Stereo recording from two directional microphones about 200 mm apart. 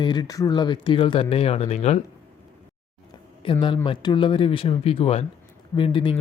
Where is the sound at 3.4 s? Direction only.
25° left (ahead or behind).